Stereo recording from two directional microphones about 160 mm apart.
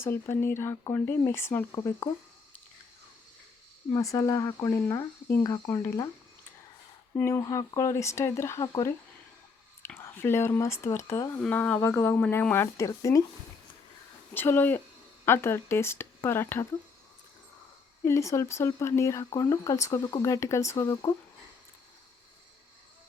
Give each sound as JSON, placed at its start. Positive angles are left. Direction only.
{"t": 0.0, "sound": "speech", "side_deg": 15}
{"t": 3.9, "sound": "speech", "side_deg": 20}
{"t": 7.2, "sound": "speech", "side_deg": 15}
{"t": 14.3, "sound": "speech", "side_deg": 15}
{"t": 18.0, "sound": "speech", "side_deg": 20}